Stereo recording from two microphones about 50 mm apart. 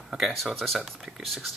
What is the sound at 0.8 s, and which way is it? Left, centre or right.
Speech, centre.